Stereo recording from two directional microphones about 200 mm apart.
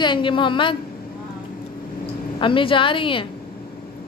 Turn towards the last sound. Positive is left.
turn(degrees=25)  # may be behind; listen again after turning